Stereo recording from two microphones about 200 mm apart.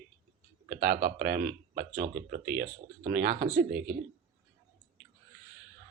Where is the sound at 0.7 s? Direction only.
50° right (ahead or behind).